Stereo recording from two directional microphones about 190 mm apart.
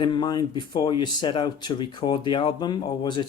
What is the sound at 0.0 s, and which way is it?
Speech, 25° left (ahead or behind).